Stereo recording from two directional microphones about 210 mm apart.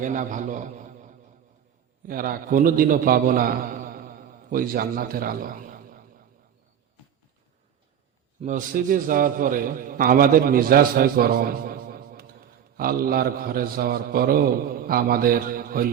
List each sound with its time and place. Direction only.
0.0 s a man's voice: 35° right (ahead or behind)
8.4 s a man's voice: 35° right (ahead or behind)